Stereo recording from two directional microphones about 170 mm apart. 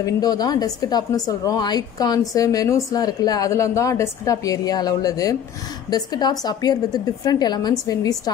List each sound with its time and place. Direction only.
0.0 s a woman's voice: 20° left (ahead or behind)